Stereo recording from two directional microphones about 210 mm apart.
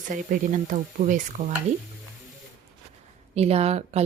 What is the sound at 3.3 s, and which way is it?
Speech, 30° right (ahead or behind).